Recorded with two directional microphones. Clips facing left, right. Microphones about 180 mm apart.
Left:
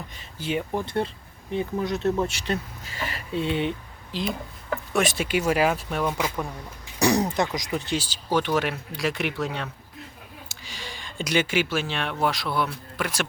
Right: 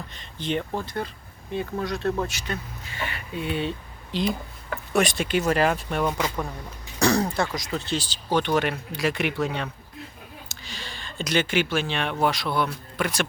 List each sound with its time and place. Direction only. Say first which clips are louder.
0.1 s speech: right 1 dB; 10° left (ahead or behind)
0.9 s speech: left 4 dB; 25° left (ahead or behind)
2.2 s speech: left 4 dB; 30° left (ahead or behind)
4.1 s speech: right 3 dB; centre (ahead or behind)
10.5 s speech: left 2 dB; 10° left (ahead or behind)